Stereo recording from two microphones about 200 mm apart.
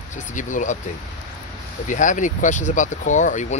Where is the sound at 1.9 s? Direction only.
40° left (ahead or behind).